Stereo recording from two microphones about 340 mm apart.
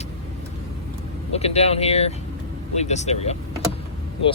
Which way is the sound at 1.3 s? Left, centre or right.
Centre.